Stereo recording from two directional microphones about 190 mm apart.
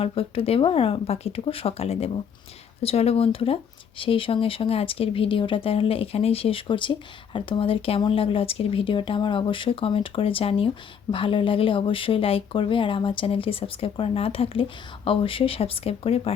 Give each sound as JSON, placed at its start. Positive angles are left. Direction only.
{"t": 0.0, "sound": "speech", "side_deg": 30}